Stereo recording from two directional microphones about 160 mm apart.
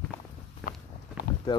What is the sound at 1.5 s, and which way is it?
Speech, 25° left (ahead or behind).